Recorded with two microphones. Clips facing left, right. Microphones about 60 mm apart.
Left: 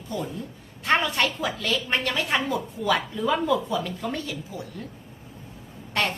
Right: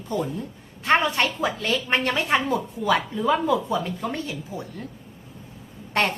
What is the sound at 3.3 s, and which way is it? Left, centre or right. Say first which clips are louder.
Speech: even; centre.